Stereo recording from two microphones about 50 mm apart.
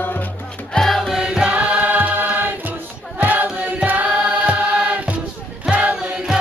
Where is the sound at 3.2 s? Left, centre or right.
Right.